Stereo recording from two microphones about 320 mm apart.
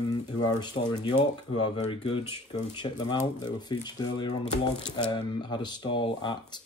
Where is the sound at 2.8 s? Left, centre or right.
Centre.